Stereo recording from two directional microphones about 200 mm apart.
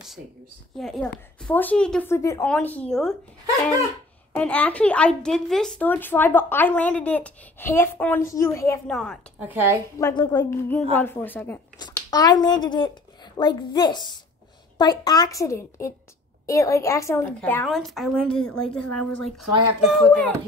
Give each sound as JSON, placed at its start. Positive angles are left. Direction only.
{"t": 0.7, "sound": "a woman's voice", "side_deg": 0}
{"t": 4.4, "sound": "a woman's voice", "side_deg": 10}
{"t": 8.8, "sound": "a woman's voice", "side_deg": 5}
{"t": 9.4, "sound": "a woman's voice", "side_deg": -10}
{"t": 9.9, "sound": "a woman's voice", "side_deg": 15}
{"t": 11.8, "sound": "a woman's voice", "side_deg": 20}